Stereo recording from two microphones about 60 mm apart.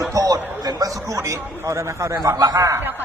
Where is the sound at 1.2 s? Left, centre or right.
Right.